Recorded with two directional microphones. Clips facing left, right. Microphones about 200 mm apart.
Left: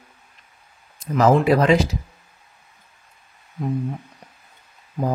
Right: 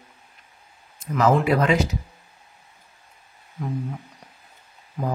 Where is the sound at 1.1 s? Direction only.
35° left (ahead or behind).